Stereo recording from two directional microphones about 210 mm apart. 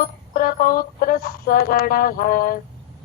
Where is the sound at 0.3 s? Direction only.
45° left (ahead or behind).